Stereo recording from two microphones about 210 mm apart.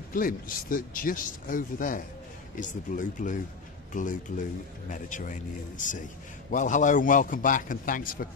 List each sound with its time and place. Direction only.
0.1 s speech: 40° left (ahead or behind)